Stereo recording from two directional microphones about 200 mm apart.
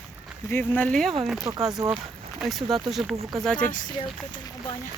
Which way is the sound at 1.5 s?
15° right (ahead or behind).